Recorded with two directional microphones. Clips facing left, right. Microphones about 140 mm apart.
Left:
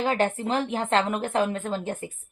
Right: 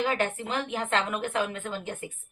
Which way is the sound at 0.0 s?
30° left (ahead or behind).